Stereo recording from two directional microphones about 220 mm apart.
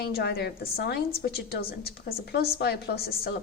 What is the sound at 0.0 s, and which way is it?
A woman's voice, 45° left (ahead or behind).